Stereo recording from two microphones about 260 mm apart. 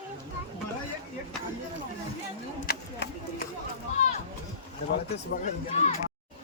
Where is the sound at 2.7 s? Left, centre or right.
Left.